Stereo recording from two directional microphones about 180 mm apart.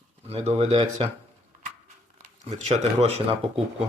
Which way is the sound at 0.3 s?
35° right (ahead or behind).